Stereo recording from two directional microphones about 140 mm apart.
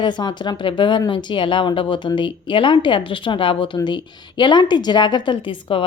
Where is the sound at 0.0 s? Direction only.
30° left (ahead or behind).